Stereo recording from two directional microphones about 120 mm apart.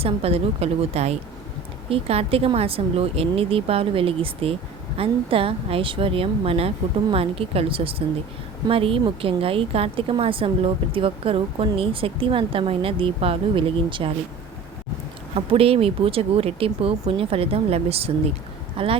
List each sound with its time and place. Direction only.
0.0 s a woman's voice: 55° right (ahead or behind)
15.4 s speech: 50° right (ahead or behind)